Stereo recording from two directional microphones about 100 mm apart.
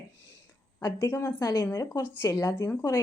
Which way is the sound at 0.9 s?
20° left (ahead or behind).